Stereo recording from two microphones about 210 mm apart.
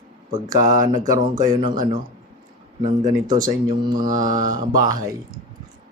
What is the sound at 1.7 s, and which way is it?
Mantra, 40° right (ahead or behind).